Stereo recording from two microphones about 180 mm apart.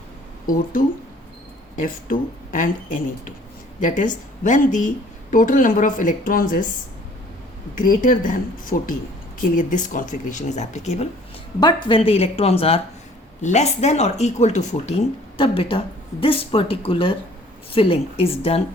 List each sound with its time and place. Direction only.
1.7 s speech: 50° left (ahead or behind)
7.8 s speech: 50° left (ahead or behind)
11.6 s speech: 30° left (ahead or behind)